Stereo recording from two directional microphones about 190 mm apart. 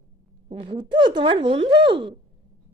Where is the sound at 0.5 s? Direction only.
25° right (ahead or behind).